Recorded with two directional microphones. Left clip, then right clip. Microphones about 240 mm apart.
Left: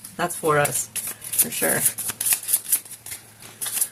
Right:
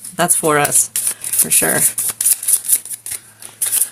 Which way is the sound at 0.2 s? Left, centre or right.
Right.